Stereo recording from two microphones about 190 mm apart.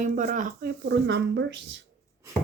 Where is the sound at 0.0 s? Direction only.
45° right (ahead or behind).